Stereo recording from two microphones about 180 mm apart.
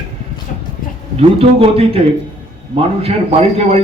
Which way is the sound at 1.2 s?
35° right (ahead or behind).